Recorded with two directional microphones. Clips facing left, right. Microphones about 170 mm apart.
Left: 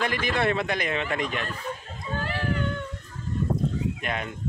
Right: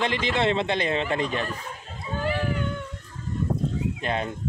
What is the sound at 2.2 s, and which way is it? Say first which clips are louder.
Run: right 4 dB; centre (ahead or behind).